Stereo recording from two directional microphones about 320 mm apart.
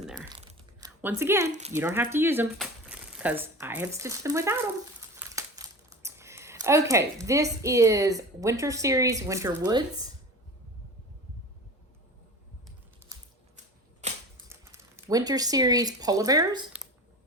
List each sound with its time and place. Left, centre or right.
0.8 s a sound: centre
1.5 s speech: right
1.7 s speech: centre
14.0 s typewriter: right
14.5 s speech: centre